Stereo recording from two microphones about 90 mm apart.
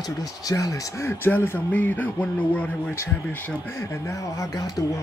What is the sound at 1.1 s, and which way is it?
Speech, 25° left (ahead or behind).